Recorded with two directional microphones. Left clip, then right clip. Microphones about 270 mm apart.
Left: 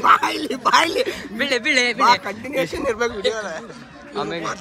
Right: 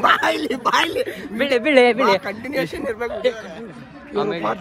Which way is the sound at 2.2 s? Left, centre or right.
Centre.